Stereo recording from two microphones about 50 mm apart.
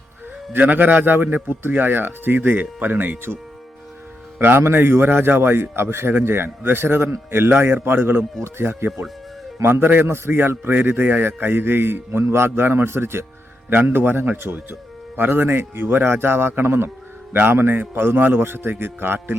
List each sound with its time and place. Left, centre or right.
0.5 s speech: right
4.4 s a man's voice: right
12.2 s a man's voice: right
13.7 s a man's voice: right